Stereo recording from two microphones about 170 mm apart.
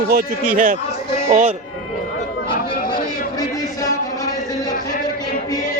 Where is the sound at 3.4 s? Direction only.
20° left (ahead or behind).